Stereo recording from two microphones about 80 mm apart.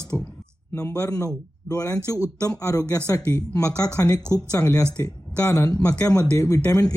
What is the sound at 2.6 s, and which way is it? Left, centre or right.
Speech, left.